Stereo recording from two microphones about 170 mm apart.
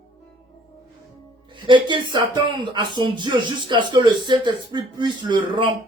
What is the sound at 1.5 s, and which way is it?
Speech, 30° right (ahead or behind).